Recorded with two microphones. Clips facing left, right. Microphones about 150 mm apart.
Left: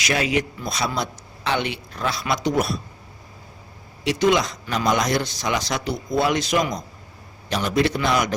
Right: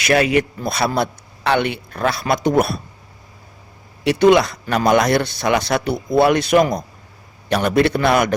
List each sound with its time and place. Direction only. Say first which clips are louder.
0.0 s a man's voice: right 7 dB; 60° right (ahead or behind)
4.0 s a man's voice: right 6 dB; 60° right (ahead or behind)